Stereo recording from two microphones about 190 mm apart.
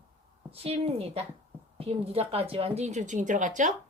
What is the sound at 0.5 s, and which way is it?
A woman's voice, 30° right (ahead or behind).